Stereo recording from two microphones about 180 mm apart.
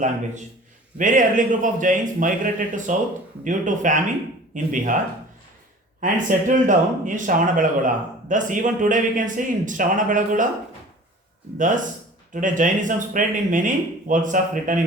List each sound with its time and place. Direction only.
0.9 s speech: 45° right (ahead or behind)
6.0 s speech: 45° right (ahead or behind)
11.5 s speech: 45° right (ahead or behind)